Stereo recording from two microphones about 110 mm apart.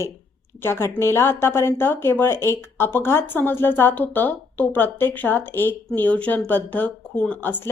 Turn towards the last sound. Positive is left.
turn(degrees=15)  # may be behind; listen again after turning